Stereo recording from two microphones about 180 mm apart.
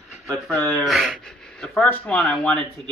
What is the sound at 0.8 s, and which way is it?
Speech, centre (ahead or behind).